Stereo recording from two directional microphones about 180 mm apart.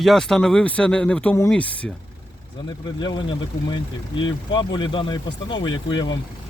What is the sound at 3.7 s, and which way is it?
Speech, 25° left (ahead or behind).